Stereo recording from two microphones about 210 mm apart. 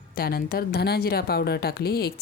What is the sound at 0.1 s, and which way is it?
Speech, 45° left (ahead or behind).